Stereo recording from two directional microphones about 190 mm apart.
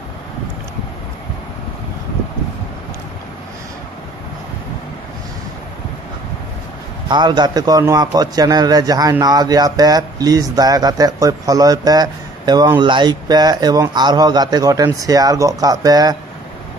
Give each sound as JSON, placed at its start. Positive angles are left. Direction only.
{"t": 7.1, "sound": "a man's voice", "side_deg": -25}